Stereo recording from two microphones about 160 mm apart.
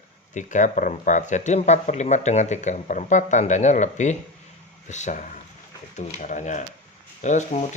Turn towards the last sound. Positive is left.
turn(degrees=45)  # may be behind; listen again after turning